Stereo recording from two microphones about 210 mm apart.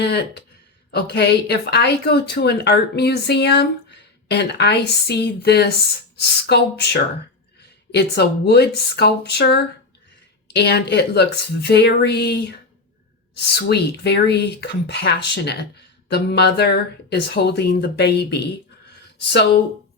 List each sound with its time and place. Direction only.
0.0 s speech: 55° left (ahead or behind)